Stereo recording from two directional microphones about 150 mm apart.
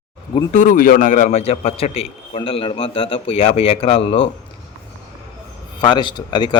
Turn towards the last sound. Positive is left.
turn(degrees=30)  # may be behind; listen again after turning